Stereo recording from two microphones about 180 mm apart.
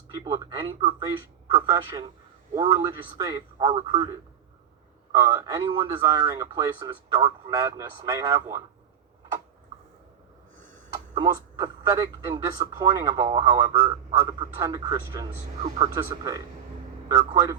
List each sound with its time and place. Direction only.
0.3 s a man's voice: 25° right (ahead or behind)
5.2 s a man's voice: 15° right (ahead or behind)
10.9 s a man's voice: 25° right (ahead or behind)
15.3 s speech: 35° right (ahead or behind)
17.1 s a man's voice: 15° right (ahead or behind)